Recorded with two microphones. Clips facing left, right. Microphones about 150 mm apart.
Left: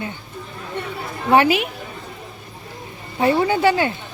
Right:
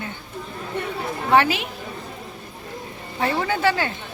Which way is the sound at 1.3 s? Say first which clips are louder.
Left 3 dB; 15° left (ahead or behind).